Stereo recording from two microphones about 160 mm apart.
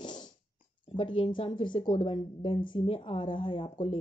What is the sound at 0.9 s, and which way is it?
A woman's voice, 30° left (ahead or behind).